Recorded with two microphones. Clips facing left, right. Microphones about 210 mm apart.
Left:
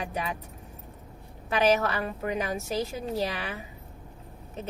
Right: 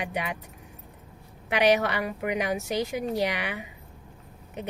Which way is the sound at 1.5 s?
15° right (ahead or behind).